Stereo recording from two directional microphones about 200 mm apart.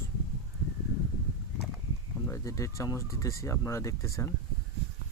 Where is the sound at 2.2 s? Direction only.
15° left (ahead or behind).